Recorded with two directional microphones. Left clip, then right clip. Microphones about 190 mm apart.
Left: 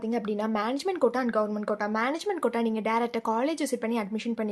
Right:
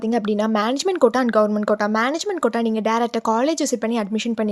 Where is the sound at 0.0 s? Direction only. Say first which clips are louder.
Right 8 dB; 40° right (ahead or behind).